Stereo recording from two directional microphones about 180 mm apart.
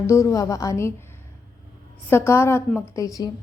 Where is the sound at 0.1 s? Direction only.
15° left (ahead or behind).